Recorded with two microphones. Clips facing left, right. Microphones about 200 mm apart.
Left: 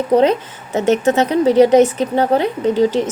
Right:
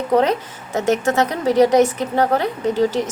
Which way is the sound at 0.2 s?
20° left (ahead or behind).